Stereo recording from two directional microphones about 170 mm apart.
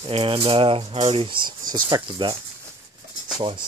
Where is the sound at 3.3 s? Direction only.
30° right (ahead or behind).